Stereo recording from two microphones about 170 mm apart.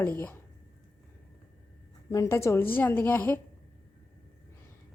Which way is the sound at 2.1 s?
20° left (ahead or behind).